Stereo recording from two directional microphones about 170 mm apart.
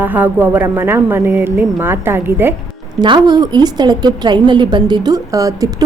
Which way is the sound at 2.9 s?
25° right (ahead or behind).